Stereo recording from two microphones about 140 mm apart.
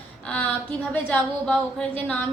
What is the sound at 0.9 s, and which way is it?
A woman's voice, 10° left (ahead or behind).